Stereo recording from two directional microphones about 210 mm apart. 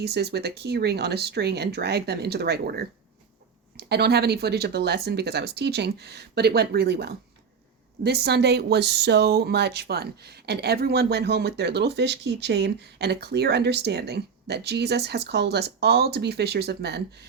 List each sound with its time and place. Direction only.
0.0 s speech: 50° right (ahead or behind)